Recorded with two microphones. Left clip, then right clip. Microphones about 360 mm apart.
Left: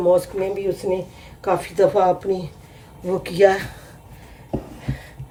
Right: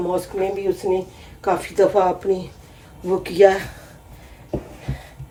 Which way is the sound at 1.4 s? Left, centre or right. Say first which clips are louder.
Even; centre.